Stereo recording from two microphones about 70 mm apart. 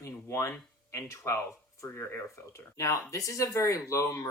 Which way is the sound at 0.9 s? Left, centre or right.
Left.